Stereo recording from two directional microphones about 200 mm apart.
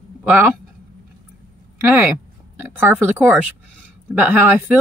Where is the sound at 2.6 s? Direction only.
10° right (ahead or behind).